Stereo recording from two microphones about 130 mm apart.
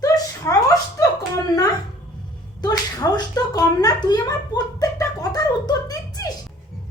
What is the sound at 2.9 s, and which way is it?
A child's voice, 30° left (ahead or behind).